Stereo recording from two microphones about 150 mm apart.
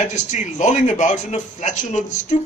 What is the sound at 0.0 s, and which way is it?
A man's voice, 55° left (ahead or behind).